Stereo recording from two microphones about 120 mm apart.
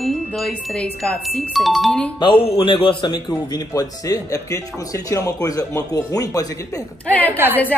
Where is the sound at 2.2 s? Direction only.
45° left (ahead or behind).